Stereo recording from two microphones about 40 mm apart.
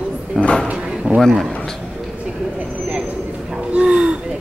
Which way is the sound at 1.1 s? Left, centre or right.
Right.